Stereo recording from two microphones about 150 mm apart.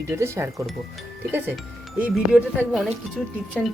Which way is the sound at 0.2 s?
20° right (ahead or behind).